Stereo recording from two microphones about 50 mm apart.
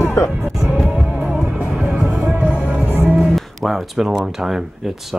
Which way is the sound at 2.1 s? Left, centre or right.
Right.